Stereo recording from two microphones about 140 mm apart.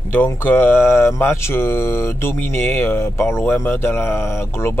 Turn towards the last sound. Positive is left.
turn(degrees=15)  # may be behind; listen again after turning